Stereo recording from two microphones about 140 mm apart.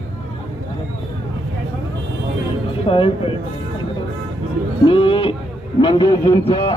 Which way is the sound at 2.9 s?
40° left (ahead or behind).